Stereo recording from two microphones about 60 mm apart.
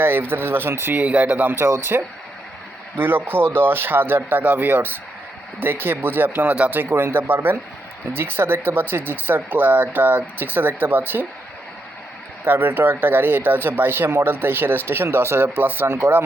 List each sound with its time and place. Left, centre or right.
0.0 s speech: right
1.0 s speech: right
1.5 s speech: right
3.0 s speech: right
6.9 s speech: right
12.5 s speech: right
15.4 s speech: right
15.9 s speech: right